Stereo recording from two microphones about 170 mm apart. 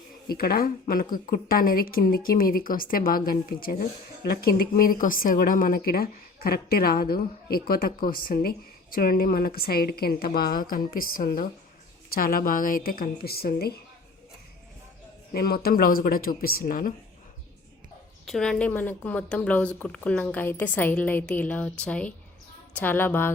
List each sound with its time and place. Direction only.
0.3 s a woman's voice: 60° left (ahead or behind)
15.3 s a woman's voice: 65° left (ahead or behind)
18.3 s a woman's voice: 5° left (ahead or behind)